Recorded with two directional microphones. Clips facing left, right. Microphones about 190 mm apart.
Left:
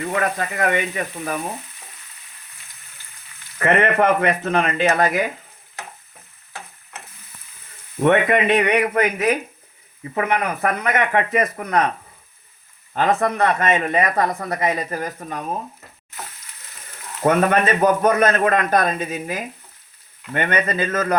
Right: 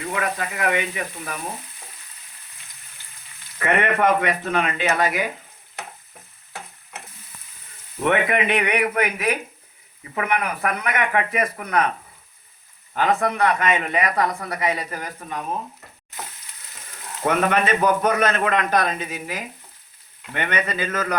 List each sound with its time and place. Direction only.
0.2 s speech: 45° left (ahead or behind)
3.6 s speech: 40° left (ahead or behind)
8.0 s speech: 40° left (ahead or behind)
13.0 s speech: 45° left (ahead or behind)
17.2 s speech: 45° left (ahead or behind)